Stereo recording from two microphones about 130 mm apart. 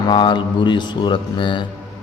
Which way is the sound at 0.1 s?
35° left (ahead or behind).